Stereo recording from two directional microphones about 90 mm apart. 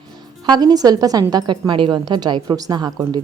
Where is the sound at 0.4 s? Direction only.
50° right (ahead or behind).